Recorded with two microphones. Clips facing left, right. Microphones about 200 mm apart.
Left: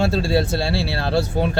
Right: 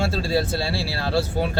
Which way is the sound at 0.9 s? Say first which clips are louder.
Left 3 dB; 25° left (ahead or behind).